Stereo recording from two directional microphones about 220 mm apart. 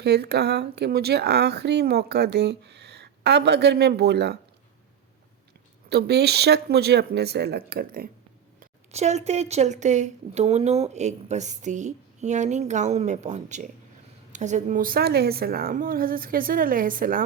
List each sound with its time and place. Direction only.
0.0 s speech: 50° right (ahead or behind)
5.9 s speech: 50° right (ahead or behind)
8.9 s speech: 30° right (ahead or behind)